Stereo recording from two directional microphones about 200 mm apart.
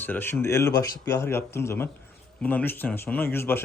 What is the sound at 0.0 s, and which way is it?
A man's voice, 10° left (ahead or behind).